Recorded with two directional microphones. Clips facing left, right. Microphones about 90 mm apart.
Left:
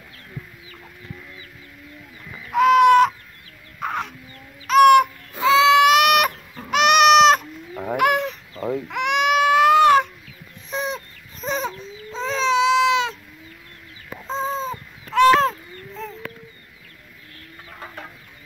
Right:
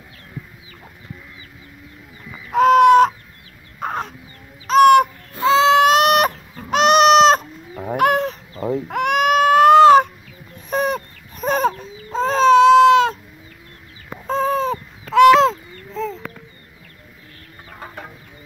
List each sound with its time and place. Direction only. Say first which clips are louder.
2.5 s fowl: right 3 dB; 35° right (ahead or behind)
3.8 s crow: right 2 dB; 35° right (ahead or behind)
4.6 s bird: right 1 dB; 30° right (ahead or behind)
5.5 s baby cry: right 1 dB; 35° right (ahead or behind)
6.7 s fowl: right 2 dB; 35° right (ahead or behind)
8.8 s baby cry: right 3 dB; 45° right (ahead or behind)
10.7 s a sound: right 7 dB; 55° right (ahead or behind)
14.2 s baby cry: right 6 dB; 60° right (ahead or behind); by 15.5 s 90° right
17.6 s chicken: right 2 dB; 10° right (ahead or behind)